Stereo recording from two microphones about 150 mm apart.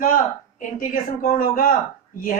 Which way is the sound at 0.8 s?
70° left (ahead or behind).